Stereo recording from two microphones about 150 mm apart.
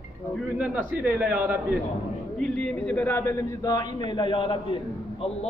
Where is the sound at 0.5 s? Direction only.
10° right (ahead or behind).